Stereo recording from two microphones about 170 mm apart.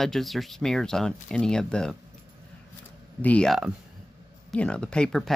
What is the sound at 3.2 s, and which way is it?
Speech, 5° left (ahead or behind).